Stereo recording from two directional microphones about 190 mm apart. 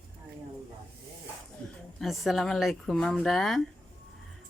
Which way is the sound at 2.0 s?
Centre (ahead or behind).